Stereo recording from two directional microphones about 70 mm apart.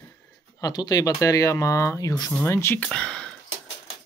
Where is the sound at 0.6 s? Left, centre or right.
Left.